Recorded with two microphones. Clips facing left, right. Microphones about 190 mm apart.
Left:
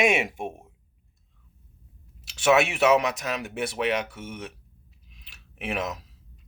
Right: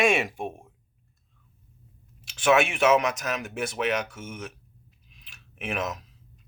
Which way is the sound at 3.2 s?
30° left (ahead or behind).